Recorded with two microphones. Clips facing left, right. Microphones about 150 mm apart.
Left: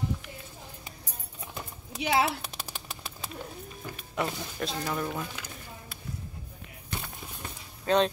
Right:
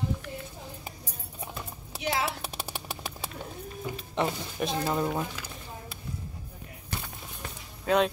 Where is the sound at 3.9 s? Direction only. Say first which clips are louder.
Right 3 dB; 20° right (ahead or behind).